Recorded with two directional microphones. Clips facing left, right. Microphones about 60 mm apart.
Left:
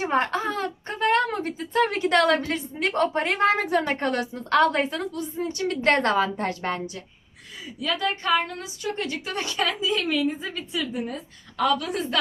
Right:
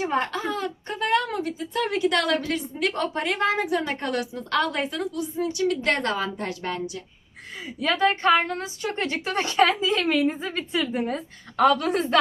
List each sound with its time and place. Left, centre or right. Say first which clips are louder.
0.0 s speech: left 2 dB; left
7.8 s a woman's voice: right 5 dB; right